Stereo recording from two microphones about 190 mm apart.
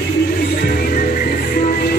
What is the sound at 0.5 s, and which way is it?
Music, 50° left (ahead or behind).